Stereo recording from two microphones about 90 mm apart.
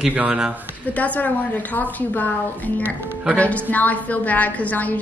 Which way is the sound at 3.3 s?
15° left (ahead or behind).